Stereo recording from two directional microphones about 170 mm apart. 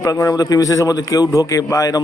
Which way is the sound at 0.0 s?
20° left (ahead or behind).